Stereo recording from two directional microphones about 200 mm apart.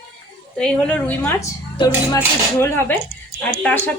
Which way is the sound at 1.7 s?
20° left (ahead or behind).